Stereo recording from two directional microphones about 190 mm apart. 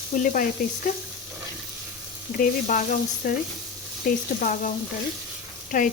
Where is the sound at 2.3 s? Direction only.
45° left (ahead or behind).